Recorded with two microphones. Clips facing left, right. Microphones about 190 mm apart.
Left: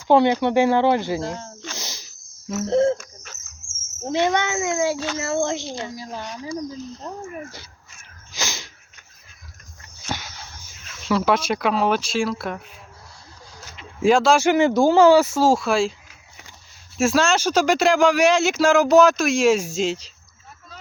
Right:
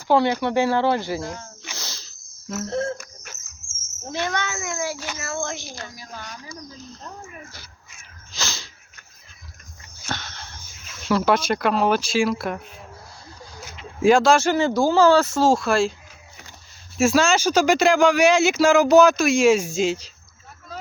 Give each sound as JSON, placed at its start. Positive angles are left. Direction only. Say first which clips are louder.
{"t": 0.1, "sound": "speech", "louder": "left 3 dB", "side_deg": 20}
{"t": 1.7, "sound": "cricket", "louder": "left 2 dB", "side_deg": 20}
{"t": 2.6, "sound": "speech", "louder": "left 8 dB", "side_deg": 20}
{"t": 4.0, "sound": "speech", "louder": "left 6 dB", "side_deg": 20}
{"t": 8.3, "sound": "a sound", "louder": "left 2 dB", "side_deg": 15}
{"t": 10.1, "sound": "wheeze", "louder": "left 1 dB", "side_deg": 10}
{"t": 10.8, "sound": "speech", "louder": "even", "side_deg": 0}
{"t": 13.6, "sound": "a sound", "louder": "right 1 dB", "side_deg": 0}
{"t": 14.4, "sound": "speech", "louder": "left 3 dB", "side_deg": 15}
{"t": 15.4, "sound": "speech", "louder": "even", "side_deg": 5}
{"t": 17.0, "sound": "speech", "louder": "right 1 dB", "side_deg": 0}